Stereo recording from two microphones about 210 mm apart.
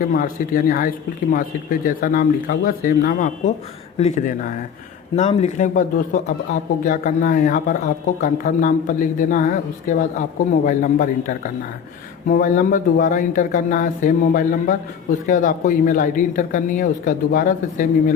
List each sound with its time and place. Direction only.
0.0 s speech: 40° left (ahead or behind)